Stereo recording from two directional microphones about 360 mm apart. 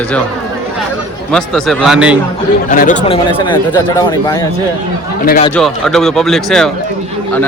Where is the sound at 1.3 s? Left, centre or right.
Centre.